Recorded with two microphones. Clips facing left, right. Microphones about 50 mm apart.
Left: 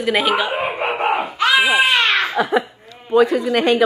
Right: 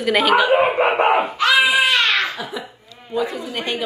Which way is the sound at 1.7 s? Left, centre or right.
Left.